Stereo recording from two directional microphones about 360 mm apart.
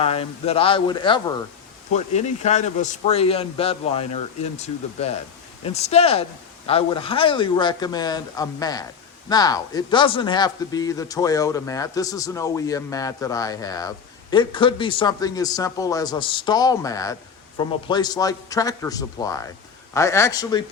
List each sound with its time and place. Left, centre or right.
0.0 s speech: centre